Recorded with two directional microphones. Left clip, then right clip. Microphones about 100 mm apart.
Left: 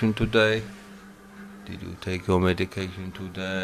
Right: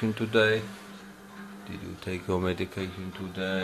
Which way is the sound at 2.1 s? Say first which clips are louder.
Left 6 dB; 35° left (ahead or behind).